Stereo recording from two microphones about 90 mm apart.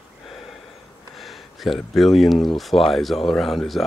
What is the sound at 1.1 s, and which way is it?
Speech, centre (ahead or behind).